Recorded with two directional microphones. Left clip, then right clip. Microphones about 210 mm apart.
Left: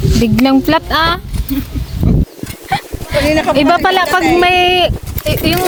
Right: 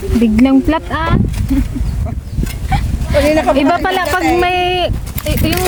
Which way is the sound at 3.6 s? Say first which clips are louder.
Left 3 dB; 20° left (ahead or behind).